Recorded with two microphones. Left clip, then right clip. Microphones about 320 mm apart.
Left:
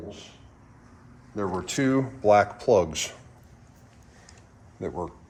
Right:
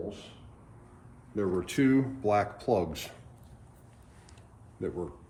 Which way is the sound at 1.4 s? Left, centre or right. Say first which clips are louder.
Left 1 dB; centre.